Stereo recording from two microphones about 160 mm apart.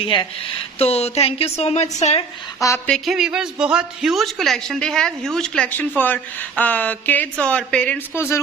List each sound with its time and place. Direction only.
0.0 s speech: 30° left (ahead or behind)
2.6 s speech: 20° left (ahead or behind)
2.8 s a woman's voice: centre (ahead or behind)